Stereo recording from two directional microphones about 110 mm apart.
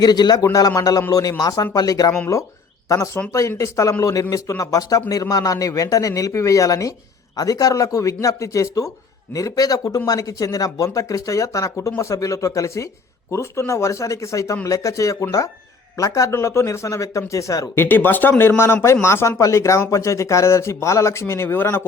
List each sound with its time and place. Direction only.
0.0 s speech: 40° left (ahead or behind)
3.2 s a man's voice: 20° left (ahead or behind)
17.7 s a man's voice: 20° left (ahead or behind)